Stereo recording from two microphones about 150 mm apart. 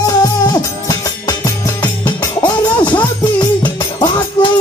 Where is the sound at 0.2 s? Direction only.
25° left (ahead or behind).